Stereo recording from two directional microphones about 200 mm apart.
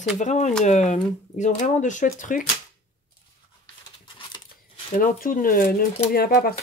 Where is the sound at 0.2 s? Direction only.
35° left (ahead or behind).